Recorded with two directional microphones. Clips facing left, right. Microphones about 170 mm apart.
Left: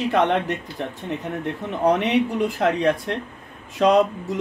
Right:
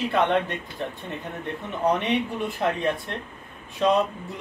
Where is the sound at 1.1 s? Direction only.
90° left.